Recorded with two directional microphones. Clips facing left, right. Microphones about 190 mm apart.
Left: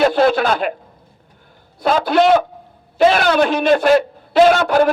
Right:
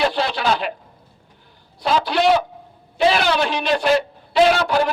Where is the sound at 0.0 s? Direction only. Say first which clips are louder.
Left 7 dB; 50° left (ahead or behind).